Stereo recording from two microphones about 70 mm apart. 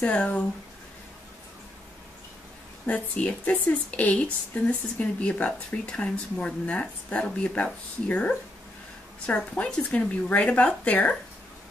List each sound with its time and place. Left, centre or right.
0.0 s speech: centre
2.9 s speech: centre
9.6 s speech: centre